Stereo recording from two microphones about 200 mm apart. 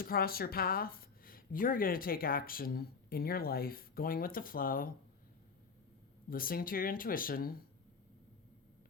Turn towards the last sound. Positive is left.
turn(degrees=45)  # may be behind; listen again after turning